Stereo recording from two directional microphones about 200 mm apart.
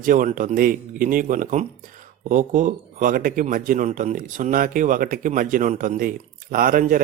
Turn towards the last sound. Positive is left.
turn(degrees=-45)  # may be behind; listen again after turning